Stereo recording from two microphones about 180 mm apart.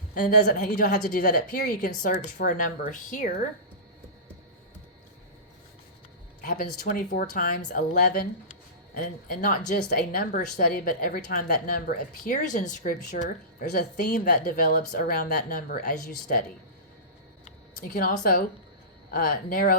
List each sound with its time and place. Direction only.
0.1 s a woman's voice: 55° left (ahead or behind)
6.4 s speech: 50° left (ahead or behind)
17.7 s speech: 50° left (ahead or behind)